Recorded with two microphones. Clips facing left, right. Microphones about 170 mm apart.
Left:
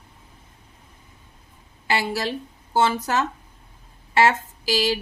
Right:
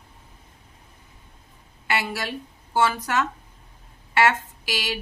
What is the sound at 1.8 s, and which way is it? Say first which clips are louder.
A woman's voice: left 3 dB; 30° left (ahead or behind).